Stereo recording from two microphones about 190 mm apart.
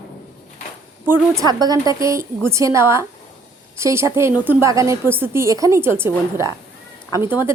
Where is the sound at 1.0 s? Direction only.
10° right (ahead or behind).